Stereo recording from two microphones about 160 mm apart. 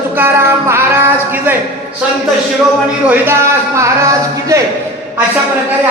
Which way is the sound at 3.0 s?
10° right (ahead or behind).